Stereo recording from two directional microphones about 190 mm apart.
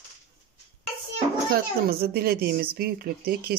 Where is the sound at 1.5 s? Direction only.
55° right (ahead or behind).